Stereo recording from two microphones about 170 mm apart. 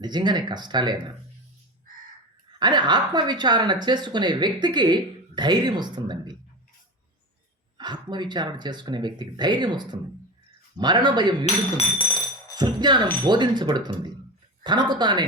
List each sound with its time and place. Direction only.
0.0 s speech: 25° right (ahead or behind)
2.6 s speech: 25° right (ahead or behind)
7.8 s speech: 25° right (ahead or behind)
11.9 s music: 25° left (ahead or behind)
12.5 s speech: 25° right (ahead or behind)